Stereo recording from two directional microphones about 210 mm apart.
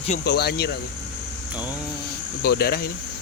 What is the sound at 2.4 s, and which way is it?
Speech, 45° left (ahead or behind).